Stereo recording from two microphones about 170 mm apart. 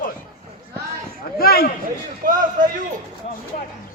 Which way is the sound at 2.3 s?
50° right (ahead or behind).